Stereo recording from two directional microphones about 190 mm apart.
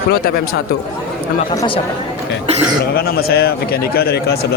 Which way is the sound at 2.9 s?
55° left (ahead or behind).